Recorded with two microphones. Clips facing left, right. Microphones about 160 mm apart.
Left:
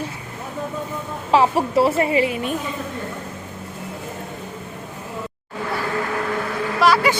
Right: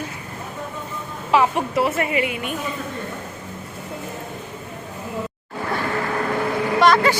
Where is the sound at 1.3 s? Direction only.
35° left (ahead or behind).